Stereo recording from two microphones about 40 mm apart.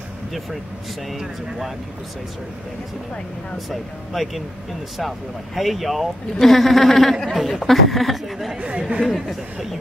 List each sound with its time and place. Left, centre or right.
1.1 s speech: centre
3.5 s speech: centre
8.5 s speech: right
9.0 s speech: centre